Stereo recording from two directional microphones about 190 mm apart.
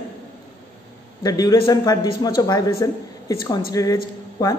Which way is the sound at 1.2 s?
20° left (ahead or behind).